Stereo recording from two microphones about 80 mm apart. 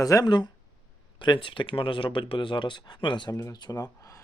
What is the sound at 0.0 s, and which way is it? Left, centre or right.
Speech, left.